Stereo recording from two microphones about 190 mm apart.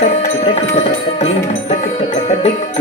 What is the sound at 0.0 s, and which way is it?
Music, 35° left (ahead or behind).